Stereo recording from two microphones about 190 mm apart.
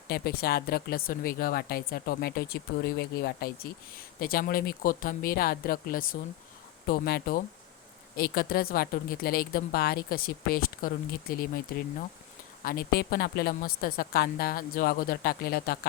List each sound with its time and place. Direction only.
0.1 s speech: 55° left (ahead or behind)